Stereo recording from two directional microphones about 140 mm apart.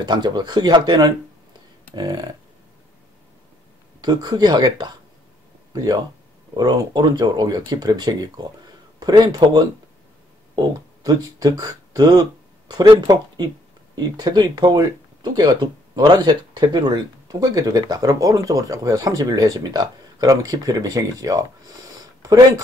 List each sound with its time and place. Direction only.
0.0 s speech: 30° right (ahead or behind)
4.0 s speech: 30° right (ahead or behind)
11.1 s speech: 30° right (ahead or behind)